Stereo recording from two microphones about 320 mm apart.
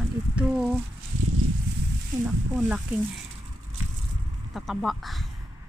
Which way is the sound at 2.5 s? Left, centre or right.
Centre.